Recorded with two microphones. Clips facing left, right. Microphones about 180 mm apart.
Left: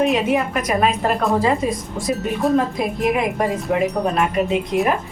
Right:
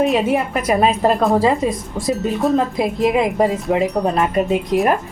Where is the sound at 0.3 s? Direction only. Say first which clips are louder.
Right 2 dB; 25° right (ahead or behind).